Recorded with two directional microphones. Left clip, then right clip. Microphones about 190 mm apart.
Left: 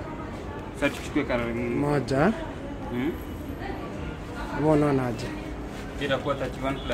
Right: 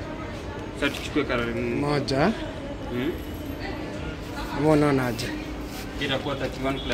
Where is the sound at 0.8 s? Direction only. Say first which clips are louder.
Right 1 dB; 50° left (ahead or behind).